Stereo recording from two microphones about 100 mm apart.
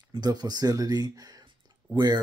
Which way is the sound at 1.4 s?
45° right (ahead or behind).